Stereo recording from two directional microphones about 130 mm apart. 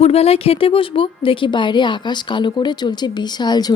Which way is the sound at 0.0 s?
50° left (ahead or behind).